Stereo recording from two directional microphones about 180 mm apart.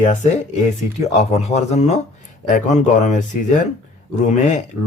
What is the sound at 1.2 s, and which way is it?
Speech, 40° left (ahead or behind).